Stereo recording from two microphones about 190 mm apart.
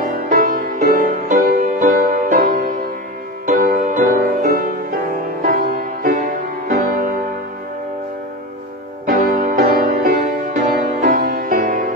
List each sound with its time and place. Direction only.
0.1 s music: 50° right (ahead or behind)
9.0 s music: 50° right (ahead or behind)